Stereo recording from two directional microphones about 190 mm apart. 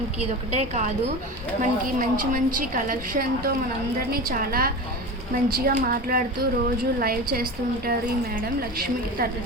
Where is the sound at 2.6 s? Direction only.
50° right (ahead or behind).